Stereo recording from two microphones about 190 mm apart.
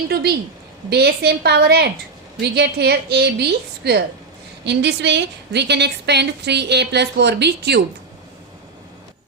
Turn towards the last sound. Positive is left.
turn(degrees=-60)  # may be behind; listen again after turning